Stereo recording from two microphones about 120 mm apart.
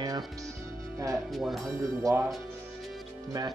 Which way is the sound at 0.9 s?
30° right (ahead or behind).